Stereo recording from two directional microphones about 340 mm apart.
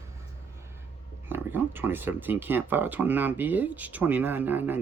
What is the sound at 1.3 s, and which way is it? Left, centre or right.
Speech, centre.